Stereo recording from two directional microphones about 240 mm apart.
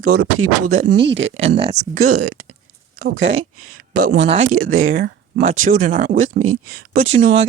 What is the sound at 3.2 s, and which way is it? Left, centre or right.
Speech, right.